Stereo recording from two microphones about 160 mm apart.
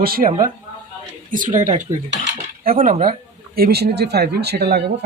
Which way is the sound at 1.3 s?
55° right (ahead or behind).